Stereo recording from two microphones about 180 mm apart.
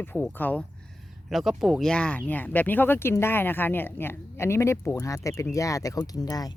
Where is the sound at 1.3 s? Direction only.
Centre (ahead or behind).